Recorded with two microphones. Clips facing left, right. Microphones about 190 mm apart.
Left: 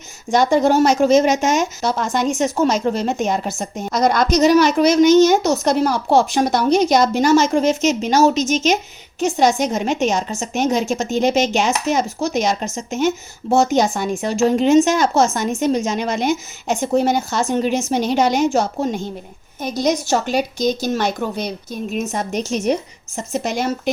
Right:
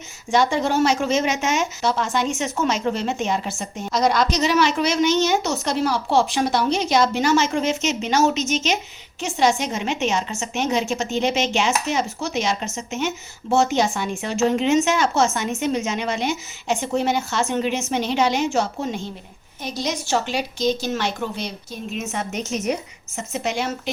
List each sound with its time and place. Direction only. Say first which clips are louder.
0.3 s a woman's voice: left 5 dB; 40° left (ahead or behind)